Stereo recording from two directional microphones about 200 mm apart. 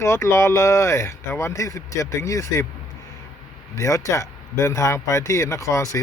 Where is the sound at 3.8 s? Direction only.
15° left (ahead or behind).